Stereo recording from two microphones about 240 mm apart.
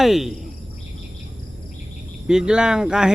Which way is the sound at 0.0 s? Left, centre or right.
Centre.